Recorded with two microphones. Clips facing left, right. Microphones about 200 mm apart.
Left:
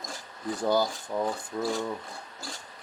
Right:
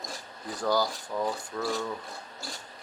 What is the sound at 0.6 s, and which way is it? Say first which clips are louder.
Rub: left 1 dB; 20° left (ahead or behind).